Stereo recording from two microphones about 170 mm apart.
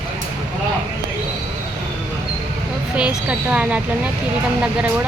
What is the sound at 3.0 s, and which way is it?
Speech, 5° right (ahead or behind).